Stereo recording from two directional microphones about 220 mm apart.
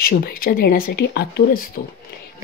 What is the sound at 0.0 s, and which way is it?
Speech, 45° left (ahead or behind).